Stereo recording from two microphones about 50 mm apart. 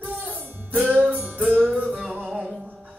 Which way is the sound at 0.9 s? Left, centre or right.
Right.